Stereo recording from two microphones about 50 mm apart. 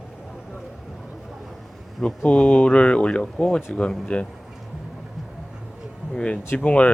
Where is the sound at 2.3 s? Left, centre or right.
Left.